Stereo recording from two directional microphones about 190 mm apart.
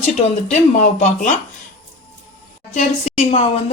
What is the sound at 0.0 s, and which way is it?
Speech, 35° left (ahead or behind).